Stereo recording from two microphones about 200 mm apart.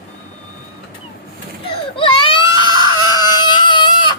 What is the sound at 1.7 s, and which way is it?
Baby cry, 25° left (ahead or behind).